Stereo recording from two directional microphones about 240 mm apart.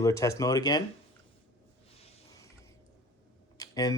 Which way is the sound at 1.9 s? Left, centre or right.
Left.